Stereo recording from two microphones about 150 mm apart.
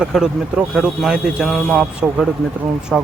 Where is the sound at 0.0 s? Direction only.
5° right (ahead or behind).